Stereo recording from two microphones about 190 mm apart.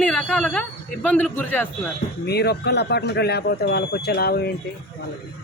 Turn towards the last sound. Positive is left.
turn(degrees=55)  # may be behind; listen again after turning